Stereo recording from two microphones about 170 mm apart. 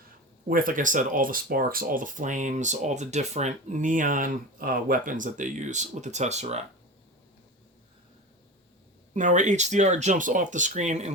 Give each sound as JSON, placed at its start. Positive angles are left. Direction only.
{"t": 0.4, "sound": "speech", "side_deg": -55}
{"t": 9.1, "sound": "speech", "side_deg": -45}